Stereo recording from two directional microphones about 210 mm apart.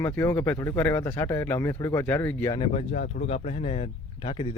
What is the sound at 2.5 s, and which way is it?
Speech, 35° left (ahead or behind).